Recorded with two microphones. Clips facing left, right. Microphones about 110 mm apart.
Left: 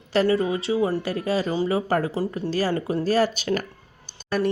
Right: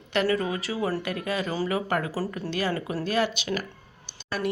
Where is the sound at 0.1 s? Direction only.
30° left (ahead or behind).